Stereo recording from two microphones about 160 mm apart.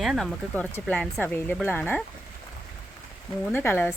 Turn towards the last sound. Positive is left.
turn(degrees=15)  # may be behind; listen again after turning